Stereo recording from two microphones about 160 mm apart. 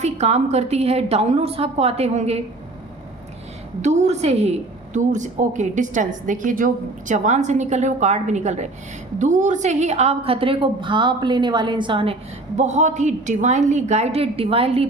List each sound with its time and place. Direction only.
0.0 s a woman's voice: 45° right (ahead or behind)
3.8 s a woman's voice: 45° right (ahead or behind)
12.5 s a woman's voice: 45° right (ahead or behind)